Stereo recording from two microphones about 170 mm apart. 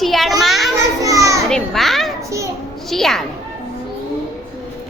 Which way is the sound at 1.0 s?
20° right (ahead or behind).